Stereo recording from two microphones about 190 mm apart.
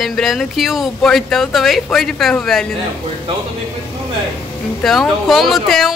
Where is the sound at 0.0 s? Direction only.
Centre (ahead or behind).